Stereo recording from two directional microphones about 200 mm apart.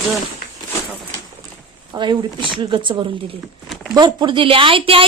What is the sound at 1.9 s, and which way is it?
Speech, 20° right (ahead or behind).